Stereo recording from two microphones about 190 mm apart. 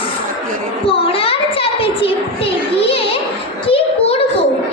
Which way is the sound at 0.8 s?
30° left (ahead or behind).